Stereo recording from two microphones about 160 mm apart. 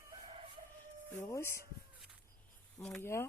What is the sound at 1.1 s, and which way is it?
Speech, 15° left (ahead or behind).